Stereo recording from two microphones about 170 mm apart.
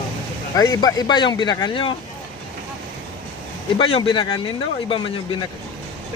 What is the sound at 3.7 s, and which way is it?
Speech, 30° left (ahead or behind).